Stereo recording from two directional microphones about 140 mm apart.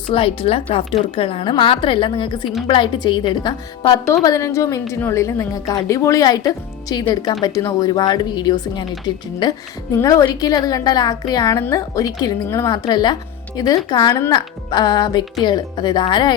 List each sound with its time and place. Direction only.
0.1 s a woman's voice: 40° left (ahead or behind)